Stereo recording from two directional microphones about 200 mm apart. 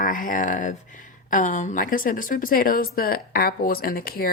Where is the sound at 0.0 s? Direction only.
40° left (ahead or behind).